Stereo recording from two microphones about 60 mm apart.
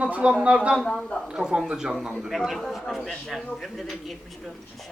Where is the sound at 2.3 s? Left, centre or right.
Centre.